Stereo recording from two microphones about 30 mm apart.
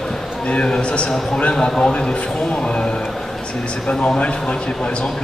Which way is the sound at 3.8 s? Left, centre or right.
Left.